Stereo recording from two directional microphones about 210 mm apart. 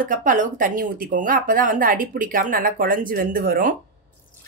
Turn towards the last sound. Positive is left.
turn(degrees=-40)  # may be behind; listen again after turning